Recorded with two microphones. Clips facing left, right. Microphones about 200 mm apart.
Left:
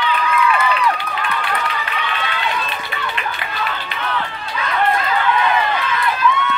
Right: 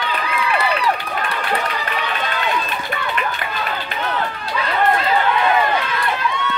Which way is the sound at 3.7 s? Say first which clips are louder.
Right 1 dB; 45° right (ahead or behind).